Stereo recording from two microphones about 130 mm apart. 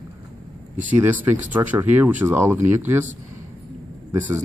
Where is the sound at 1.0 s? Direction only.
15° right (ahead or behind).